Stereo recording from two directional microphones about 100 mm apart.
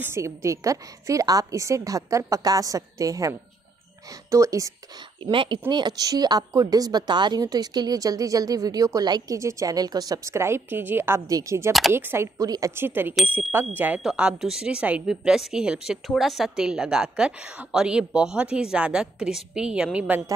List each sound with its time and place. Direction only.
0.0 s a woman's voice: 25° right (ahead or behind)
5.2 s speech: 60° right (ahead or behind)
5.7 s a woman's voice: 45° right (ahead or behind); by 12.3 s 25° right (ahead or behind)
12.4 s a woman's voice: 35° right (ahead or behind)
12.7 s a woman's voice: 20° right (ahead or behind)
14.0 s a woman's voice: 5° right (ahead or behind)